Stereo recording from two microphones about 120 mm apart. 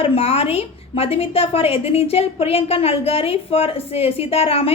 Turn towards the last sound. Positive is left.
turn(degrees=55)  # may be behind; listen again after turning